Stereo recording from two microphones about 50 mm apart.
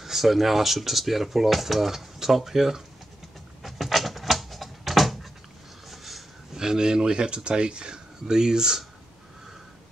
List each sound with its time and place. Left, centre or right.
0.0 s speech: centre
3.6 s a sound: centre
6.6 s speech: centre